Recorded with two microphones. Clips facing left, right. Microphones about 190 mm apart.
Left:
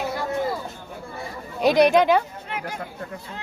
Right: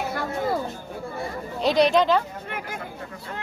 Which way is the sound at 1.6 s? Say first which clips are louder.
Left 3 dB; 15° left (ahead or behind).